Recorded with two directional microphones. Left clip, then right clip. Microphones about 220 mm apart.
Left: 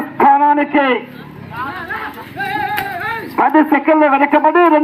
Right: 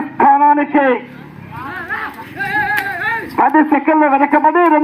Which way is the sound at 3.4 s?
25° right (ahead or behind).